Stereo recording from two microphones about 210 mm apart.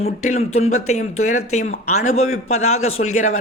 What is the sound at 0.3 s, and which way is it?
A man's voice, 30° left (ahead or behind).